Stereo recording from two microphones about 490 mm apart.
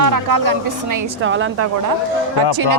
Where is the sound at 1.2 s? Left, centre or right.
Right.